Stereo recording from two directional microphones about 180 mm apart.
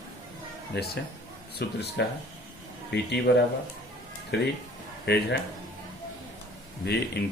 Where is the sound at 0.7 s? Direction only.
65° left (ahead or behind).